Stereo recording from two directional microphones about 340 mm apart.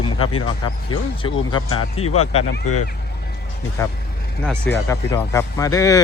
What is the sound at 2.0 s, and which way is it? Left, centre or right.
Speech, left.